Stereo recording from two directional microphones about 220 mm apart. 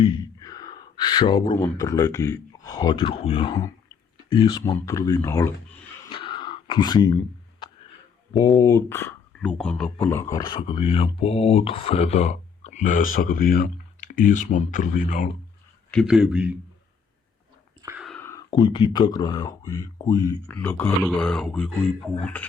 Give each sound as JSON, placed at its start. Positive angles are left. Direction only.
{"t": 0.0, "sound": "speech", "side_deg": 20}
{"t": 6.1, "sound": "a sound", "side_deg": 20}
{"t": 8.3, "sound": "speech", "side_deg": 15}
{"t": 15.9, "sound": "speech", "side_deg": 0}
{"t": 17.8, "sound": "whispering", "side_deg": -5}
{"t": 18.1, "sound": "speech", "side_deg": 10}